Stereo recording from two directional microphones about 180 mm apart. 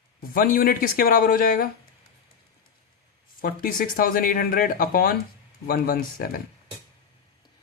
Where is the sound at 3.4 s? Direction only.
50° left (ahead or behind).